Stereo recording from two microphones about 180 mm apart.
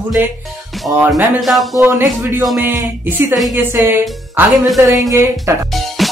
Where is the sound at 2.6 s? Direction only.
15° right (ahead or behind).